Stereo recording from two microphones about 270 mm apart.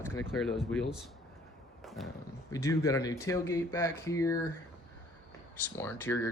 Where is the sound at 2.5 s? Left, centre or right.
Centre.